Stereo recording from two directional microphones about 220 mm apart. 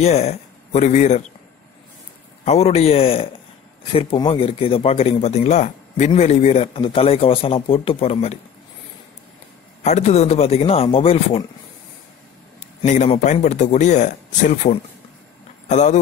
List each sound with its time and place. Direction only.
0.0 s speech: 30° left (ahead or behind)
2.4 s speech: 30° left (ahead or behind)
9.8 s speech: 30° left (ahead or behind)
12.8 s speech: 35° left (ahead or behind)